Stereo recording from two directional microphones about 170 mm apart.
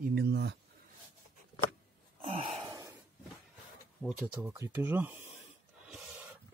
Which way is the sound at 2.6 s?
20° right (ahead or behind).